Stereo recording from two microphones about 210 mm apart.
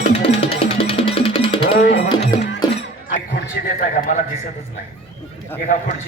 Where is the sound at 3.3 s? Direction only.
50° left (ahead or behind).